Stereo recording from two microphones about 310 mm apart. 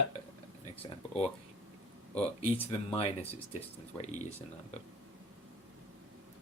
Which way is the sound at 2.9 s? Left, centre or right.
Centre.